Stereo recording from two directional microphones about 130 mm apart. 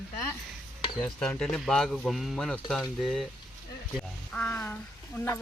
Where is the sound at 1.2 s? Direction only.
5° left (ahead or behind).